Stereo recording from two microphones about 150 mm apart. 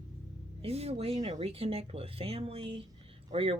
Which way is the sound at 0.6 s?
45° right (ahead or behind).